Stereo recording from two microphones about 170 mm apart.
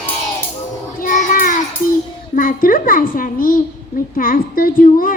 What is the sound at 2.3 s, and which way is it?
A child's voice, 55° left (ahead or behind).